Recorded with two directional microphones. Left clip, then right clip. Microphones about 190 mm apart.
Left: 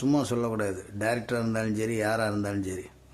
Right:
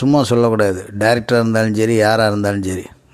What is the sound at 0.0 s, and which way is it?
Speech, 40° right (ahead or behind).